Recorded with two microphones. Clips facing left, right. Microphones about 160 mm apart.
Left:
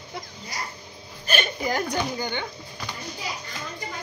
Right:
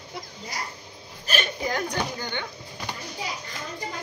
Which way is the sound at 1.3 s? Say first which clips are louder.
Left 2 dB; 5° left (ahead or behind).